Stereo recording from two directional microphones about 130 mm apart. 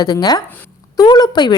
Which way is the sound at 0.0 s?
30° left (ahead or behind).